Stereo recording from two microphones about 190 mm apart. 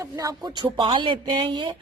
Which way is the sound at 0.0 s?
20° right (ahead or behind).